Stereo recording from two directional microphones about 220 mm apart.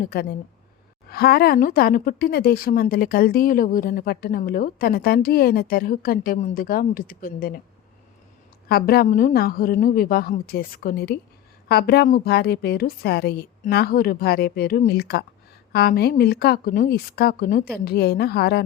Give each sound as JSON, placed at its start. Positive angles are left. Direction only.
{"t": 0.0, "sound": "a woman's voice", "side_deg": 45}
{"t": 8.7, "sound": "a woman's voice", "side_deg": 45}